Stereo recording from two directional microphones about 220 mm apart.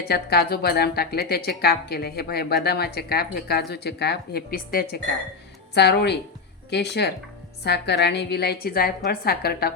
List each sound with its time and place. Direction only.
0.0 s speech: 45° left (ahead or behind)